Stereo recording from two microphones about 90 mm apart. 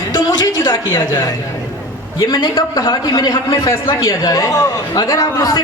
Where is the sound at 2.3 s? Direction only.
45° left (ahead or behind).